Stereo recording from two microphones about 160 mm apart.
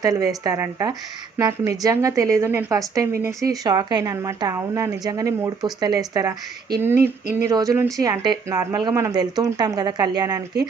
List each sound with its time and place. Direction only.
0.0 s a woman's voice: 20° right (ahead or behind)
6.7 s a sound: 15° right (ahead or behind)
7.4 s a woman's voice: 20° right (ahead or behind)